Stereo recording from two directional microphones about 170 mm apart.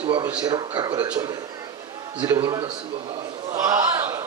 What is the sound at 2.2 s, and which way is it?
Speech, 20° right (ahead or behind).